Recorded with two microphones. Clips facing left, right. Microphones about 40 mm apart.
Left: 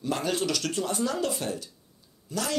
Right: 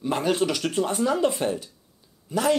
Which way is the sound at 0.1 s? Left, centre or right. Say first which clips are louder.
Right 4 dB; right.